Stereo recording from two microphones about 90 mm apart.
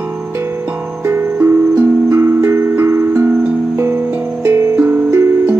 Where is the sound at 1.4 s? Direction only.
25° right (ahead or behind).